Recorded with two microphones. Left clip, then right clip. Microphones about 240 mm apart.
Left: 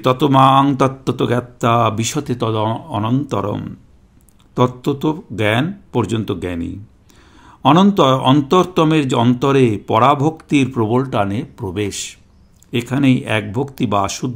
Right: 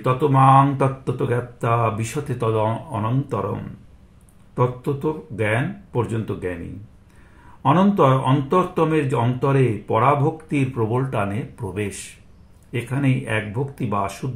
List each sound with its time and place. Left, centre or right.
0.0 s speech: left
1.1 s speech: left
2.0 s speech: left
7.6 s speech: left